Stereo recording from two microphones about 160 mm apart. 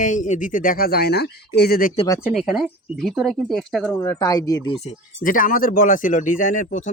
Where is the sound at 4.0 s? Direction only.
20° left (ahead or behind).